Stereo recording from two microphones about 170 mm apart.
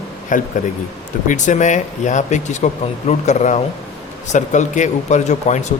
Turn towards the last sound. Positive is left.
turn(degrees=45)  # may be behind; listen again after turning